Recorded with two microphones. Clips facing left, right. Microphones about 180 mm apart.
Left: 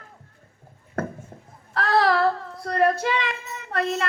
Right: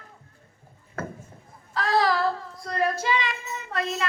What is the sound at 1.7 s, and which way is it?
Child singing, 60° left (ahead or behind).